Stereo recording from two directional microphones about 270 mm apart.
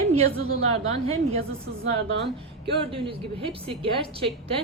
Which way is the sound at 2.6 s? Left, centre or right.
Centre.